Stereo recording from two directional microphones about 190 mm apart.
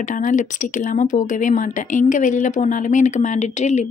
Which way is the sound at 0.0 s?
40° left (ahead or behind).